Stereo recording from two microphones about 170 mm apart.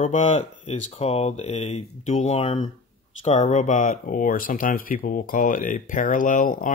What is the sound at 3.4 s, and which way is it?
Speech, 45° left (ahead or behind).